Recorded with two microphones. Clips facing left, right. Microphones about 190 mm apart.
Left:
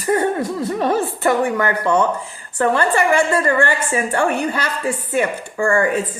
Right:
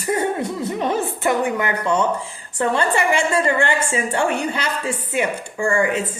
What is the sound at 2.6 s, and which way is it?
A woman's voice, 20° right (ahead or behind).